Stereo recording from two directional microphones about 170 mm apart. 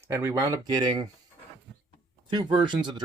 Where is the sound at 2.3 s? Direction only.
25° right (ahead or behind).